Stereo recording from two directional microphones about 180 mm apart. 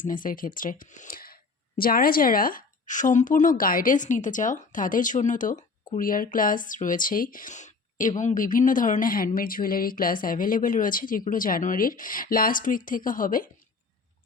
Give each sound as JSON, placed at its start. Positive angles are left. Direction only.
{"t": 0.0, "sound": "a woman's voice", "side_deg": 50}